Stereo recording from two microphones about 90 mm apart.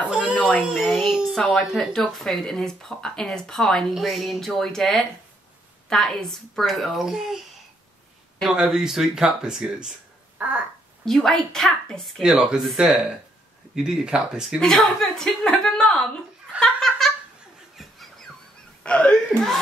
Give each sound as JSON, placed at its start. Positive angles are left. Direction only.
{"t": 0.3, "sound": "a sound", "side_deg": 15}
{"t": 0.7, "sound": "speech", "side_deg": -5}
{"t": 8.5, "sound": "speech", "side_deg": -5}
{"t": 11.1, "sound": "speech", "side_deg": 5}
{"t": 12.2, "sound": "a woman's voice", "side_deg": -5}
{"t": 16.5, "sound": "a sound", "side_deg": 5}
{"t": 18.8, "sound": "speech", "side_deg": 10}